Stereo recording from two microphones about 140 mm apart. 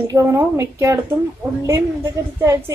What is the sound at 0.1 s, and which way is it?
Speech, 20° right (ahead or behind).